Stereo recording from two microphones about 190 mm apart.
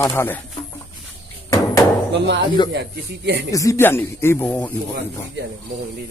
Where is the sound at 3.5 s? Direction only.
15° left (ahead or behind).